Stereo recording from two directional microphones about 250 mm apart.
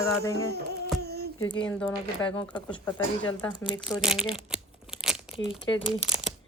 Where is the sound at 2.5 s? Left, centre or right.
Centre.